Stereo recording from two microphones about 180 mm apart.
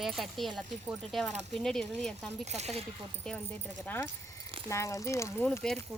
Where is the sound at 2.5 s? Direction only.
35° right (ahead or behind).